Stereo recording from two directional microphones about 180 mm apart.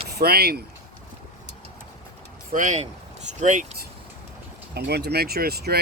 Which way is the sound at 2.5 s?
40° right (ahead or behind).